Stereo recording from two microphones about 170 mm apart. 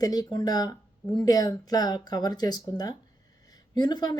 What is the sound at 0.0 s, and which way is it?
Speech, 20° left (ahead or behind).